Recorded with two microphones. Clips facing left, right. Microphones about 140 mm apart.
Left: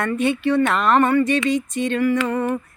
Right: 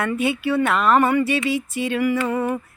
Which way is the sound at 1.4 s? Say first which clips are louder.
Left 2 dB; 5° right (ahead or behind).